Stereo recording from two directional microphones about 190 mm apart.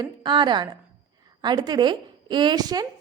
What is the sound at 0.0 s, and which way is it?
A woman's voice, 25° right (ahead or behind).